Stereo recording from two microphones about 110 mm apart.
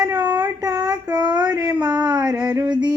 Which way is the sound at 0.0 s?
40° right (ahead or behind).